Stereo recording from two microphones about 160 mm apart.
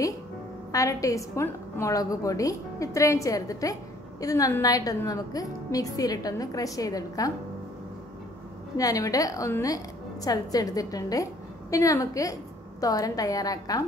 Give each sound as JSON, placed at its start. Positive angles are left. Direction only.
{"t": 0.7, "sound": "a woman's voice", "side_deg": 20}
{"t": 8.7, "sound": "a woman's voice", "side_deg": 20}